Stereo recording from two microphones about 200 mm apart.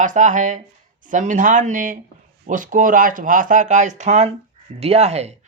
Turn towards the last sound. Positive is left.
turn(degrees=-35)  # may be behind; listen again after turning